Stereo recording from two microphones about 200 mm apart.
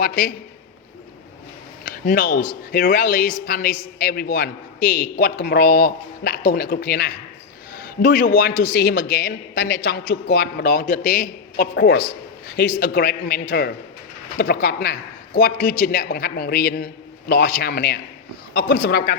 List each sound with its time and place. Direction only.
0.0 s a man's voice: 50° left (ahead or behind)
1.8 s a sound: 45° left (ahead or behind)
2.7 s a man's voice: 45° left (ahead or behind)